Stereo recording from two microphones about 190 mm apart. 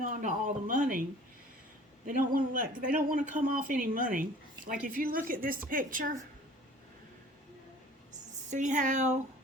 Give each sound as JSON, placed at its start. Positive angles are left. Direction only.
{"t": 0.0, "sound": "speech", "side_deg": -40}
{"t": 2.0, "sound": "speech", "side_deg": -45}
{"t": 8.4, "sound": "speech", "side_deg": -40}